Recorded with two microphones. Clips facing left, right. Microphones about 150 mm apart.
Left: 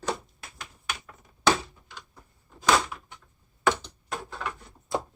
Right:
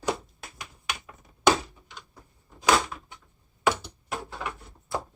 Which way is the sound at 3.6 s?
10° right (ahead or behind).